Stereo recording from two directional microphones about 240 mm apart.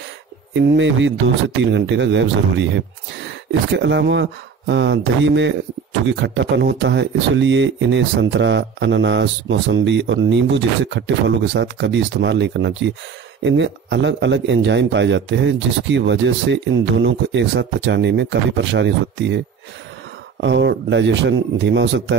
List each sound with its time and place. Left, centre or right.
0.6 s speech: right